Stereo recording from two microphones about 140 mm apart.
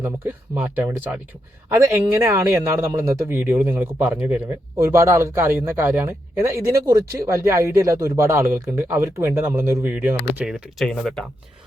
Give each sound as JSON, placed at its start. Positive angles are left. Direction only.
{"t": 0.0, "sound": "speech", "side_deg": -15}